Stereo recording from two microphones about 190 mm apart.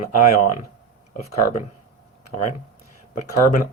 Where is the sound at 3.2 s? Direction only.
45° left (ahead or behind).